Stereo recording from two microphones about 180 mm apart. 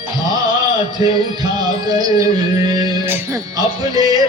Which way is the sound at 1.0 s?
20° right (ahead or behind).